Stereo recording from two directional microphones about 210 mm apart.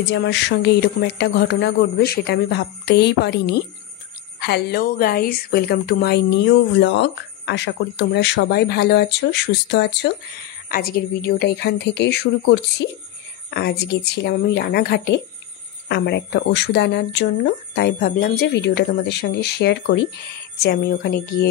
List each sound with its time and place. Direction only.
0.1 s a woman's voice: 55° left (ahead or behind)